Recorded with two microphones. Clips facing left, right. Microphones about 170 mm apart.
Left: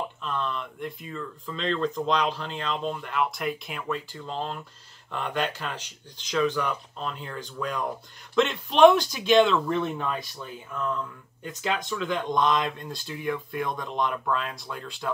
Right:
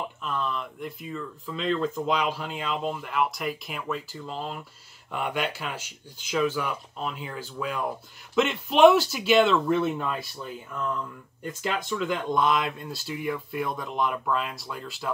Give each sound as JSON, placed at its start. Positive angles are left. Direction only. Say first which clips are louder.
{"t": 0.2, "sound": "speech", "louder": "right 3 dB", "side_deg": -5}
{"t": 11.9, "sound": "speech", "louder": "right 1 dB", "side_deg": -5}